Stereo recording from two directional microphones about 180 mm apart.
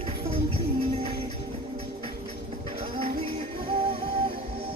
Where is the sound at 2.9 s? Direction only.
30° right (ahead or behind).